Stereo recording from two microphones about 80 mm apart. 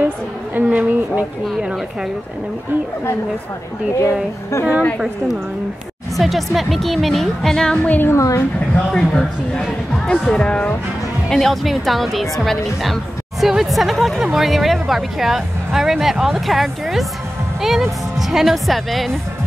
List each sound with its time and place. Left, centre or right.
0.6 s a woman's voice: centre
3.9 s a woman's voice: left
4.9 s a woman's voice: centre
7.9 s a woman's voice: left
8.2 s a woman's voice: left
8.7 s a woman's voice: centre